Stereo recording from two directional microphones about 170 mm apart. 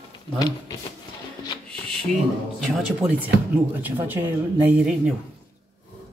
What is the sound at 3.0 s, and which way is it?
A man's voice, 10° right (ahead or behind).